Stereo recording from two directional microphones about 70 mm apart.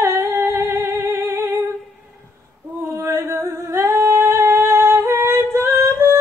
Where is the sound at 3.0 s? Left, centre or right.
Right.